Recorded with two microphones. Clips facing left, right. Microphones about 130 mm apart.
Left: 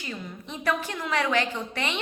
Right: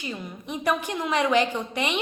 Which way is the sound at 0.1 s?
15° right (ahead or behind).